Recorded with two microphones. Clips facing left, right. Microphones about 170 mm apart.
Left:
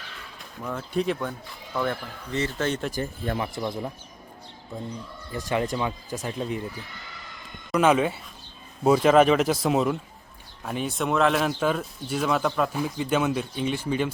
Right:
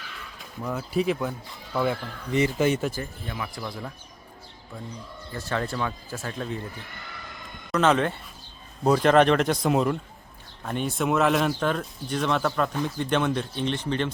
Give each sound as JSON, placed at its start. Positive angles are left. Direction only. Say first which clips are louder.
{"t": 0.3, "sound": "speech", "louder": "right 2 dB", "side_deg": -5}
{"t": 3.3, "sound": "speech", "louder": "left 2 dB", "side_deg": 25}
{"t": 5.3, "sound": "speech", "louder": "left 3 dB", "side_deg": 15}
{"t": 7.7, "sound": "speech", "louder": "left 1 dB", "side_deg": 10}